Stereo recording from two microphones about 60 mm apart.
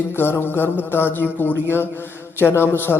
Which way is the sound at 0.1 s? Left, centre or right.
Left.